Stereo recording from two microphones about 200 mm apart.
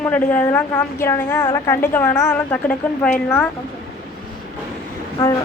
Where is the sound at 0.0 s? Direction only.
10° left (ahead or behind).